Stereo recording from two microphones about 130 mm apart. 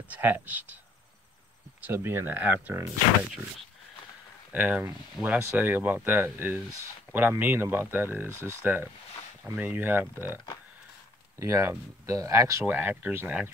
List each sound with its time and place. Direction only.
0.1 s speech: 15° right (ahead or behind)
1.9 s speech: 15° right (ahead or behind)
4.5 s speech: 15° right (ahead or behind)
11.3 s speech: 25° right (ahead or behind)